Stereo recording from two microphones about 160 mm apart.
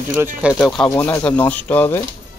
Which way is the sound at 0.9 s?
20° left (ahead or behind).